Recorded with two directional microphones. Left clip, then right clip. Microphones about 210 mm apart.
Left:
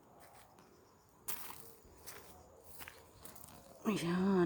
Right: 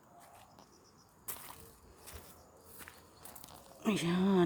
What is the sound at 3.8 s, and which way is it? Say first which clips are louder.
Speech: right 3 dB; 10° right (ahead or behind).